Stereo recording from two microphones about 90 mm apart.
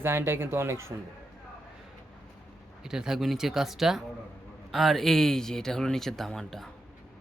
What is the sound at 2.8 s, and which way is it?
Speech, 5° right (ahead or behind).